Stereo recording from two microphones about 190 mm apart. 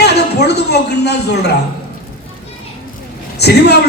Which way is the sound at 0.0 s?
60° left (ahead or behind).